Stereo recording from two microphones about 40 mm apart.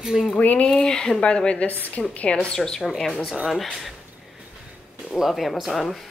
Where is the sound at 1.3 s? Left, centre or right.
Left.